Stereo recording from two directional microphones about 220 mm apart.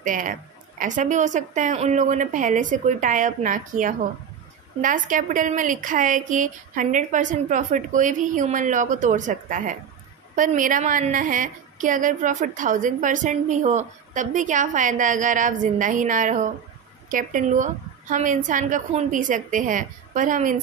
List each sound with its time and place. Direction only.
0.0 s a woman's voice: 35° right (ahead or behind)